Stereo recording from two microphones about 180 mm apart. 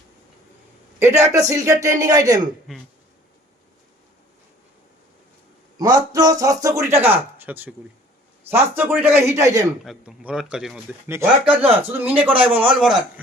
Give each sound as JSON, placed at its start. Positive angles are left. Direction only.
{"t": 0.9, "sound": "a man's voice", "side_deg": -15}
{"t": 5.8, "sound": "a man's voice", "side_deg": -20}
{"t": 9.8, "sound": "a man's voice", "side_deg": 0}